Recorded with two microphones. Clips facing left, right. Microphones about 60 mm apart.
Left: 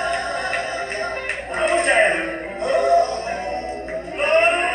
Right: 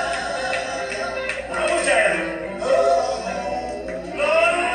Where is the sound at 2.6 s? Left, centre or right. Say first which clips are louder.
Left 1 dB; left.